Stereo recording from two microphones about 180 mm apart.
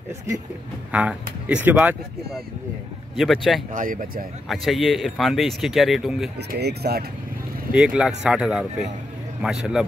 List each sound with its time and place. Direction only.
0.9 s speech: 5° right (ahead or behind)
3.7 s speech: 50° right (ahead or behind)
4.5 s speech: centre (ahead or behind)
6.5 s speech: 60° right (ahead or behind)
7.7 s speech: 5° right (ahead or behind)